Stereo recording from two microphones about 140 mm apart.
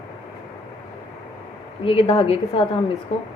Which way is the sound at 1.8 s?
40° left (ahead or behind).